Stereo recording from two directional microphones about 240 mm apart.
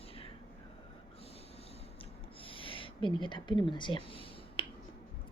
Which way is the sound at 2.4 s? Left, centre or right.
Left.